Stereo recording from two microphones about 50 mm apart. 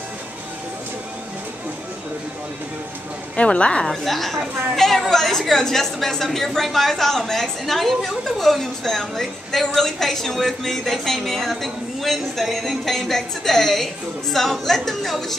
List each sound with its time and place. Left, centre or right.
3.3 s a woman's voice: left
3.9 s a woman's voice: centre